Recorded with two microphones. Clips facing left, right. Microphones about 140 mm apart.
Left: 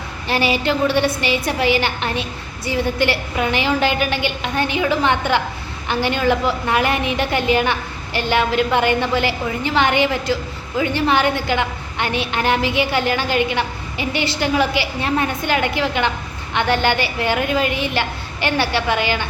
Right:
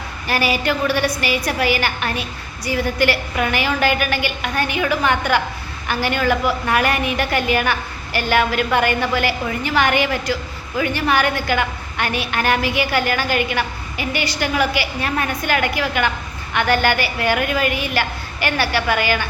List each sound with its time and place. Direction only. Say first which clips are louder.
0.3 s a woman's voice: left 1 dB; 25° left (ahead or behind)